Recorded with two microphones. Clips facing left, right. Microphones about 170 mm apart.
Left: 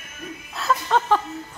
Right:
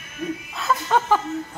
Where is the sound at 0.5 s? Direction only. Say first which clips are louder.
Left 1 dB; 5° right (ahead or behind).